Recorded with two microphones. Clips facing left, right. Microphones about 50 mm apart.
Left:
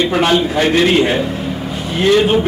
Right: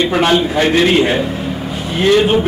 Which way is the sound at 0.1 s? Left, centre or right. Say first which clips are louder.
Right 1 dB; centre.